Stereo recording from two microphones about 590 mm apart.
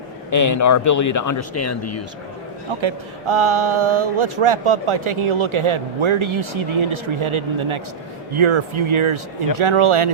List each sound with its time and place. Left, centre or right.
0.3 s speech: left
2.8 s speech: right